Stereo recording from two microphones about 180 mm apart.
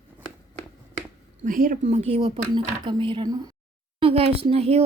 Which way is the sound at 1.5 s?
50° right (ahead or behind).